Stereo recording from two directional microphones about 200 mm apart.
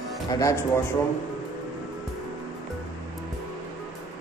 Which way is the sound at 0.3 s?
15° left (ahead or behind).